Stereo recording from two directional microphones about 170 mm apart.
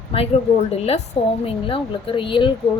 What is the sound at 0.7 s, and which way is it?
A woman's voice, 35° left (ahead or behind).